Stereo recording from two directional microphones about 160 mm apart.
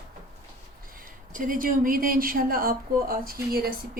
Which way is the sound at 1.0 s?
60° right (ahead or behind).